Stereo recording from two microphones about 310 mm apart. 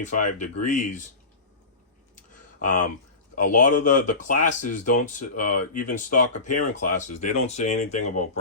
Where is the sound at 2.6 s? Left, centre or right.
Left.